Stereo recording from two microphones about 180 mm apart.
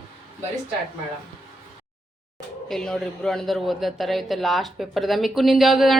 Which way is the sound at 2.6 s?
5° left (ahead or behind).